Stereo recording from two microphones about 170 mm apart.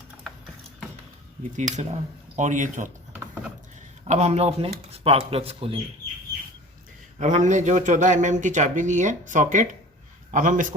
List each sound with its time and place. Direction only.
1.5 s speech: 45° right (ahead or behind)
4.0 s a man's voice: 40° right (ahead or behind)
7.2 s speech: 45° right (ahead or behind)